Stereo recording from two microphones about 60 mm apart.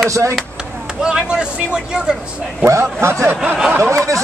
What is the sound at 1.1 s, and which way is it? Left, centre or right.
Speech, centre.